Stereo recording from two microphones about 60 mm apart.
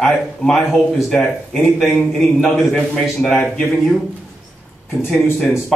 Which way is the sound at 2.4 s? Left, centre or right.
Centre.